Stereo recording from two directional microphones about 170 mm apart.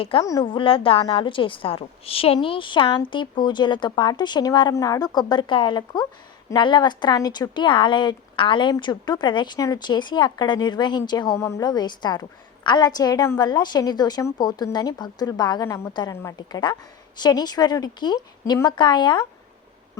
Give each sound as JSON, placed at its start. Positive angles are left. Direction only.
{"t": 0.2, "sound": "a woman's voice", "side_deg": 20}